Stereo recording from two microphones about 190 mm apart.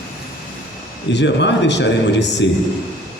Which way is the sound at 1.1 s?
70° left (ahead or behind).